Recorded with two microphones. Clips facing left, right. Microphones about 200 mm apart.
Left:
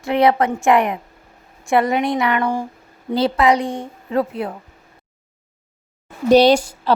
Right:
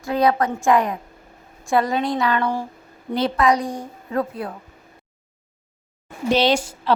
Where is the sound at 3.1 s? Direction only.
30° left (ahead or behind).